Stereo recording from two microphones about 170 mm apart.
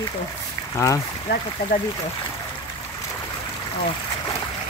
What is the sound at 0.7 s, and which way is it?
Speech, 20° left (ahead or behind).